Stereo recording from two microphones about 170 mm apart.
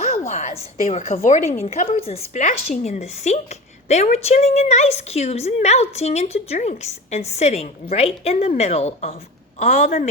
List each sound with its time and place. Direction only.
0.3 s a woman's voice: 45° left (ahead or behind)